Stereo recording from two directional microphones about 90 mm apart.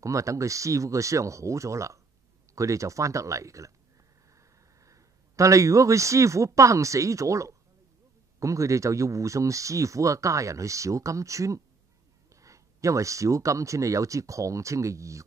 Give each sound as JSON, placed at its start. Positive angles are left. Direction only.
{"t": 0.0, "sound": "speech", "side_deg": -35}